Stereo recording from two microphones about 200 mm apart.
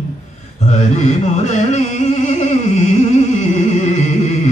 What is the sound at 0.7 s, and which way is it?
Music, 35° left (ahead or behind).